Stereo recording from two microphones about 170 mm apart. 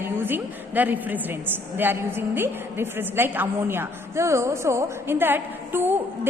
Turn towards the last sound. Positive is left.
turn(degrees=-10)  # may be behind; listen again after turning